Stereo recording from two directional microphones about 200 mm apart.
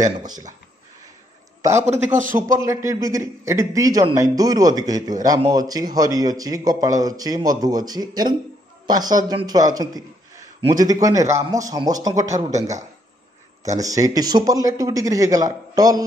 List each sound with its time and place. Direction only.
0.2 s a man's voice: 20° right (ahead or behind)
1.7 s a man's voice: 35° right (ahead or behind)
2.3 s a man's voice: 15° right (ahead or behind)
13.7 s speech: 15° right (ahead or behind)